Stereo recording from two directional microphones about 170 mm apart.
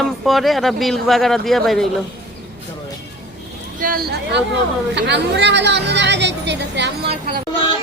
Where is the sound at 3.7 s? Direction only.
55° right (ahead or behind).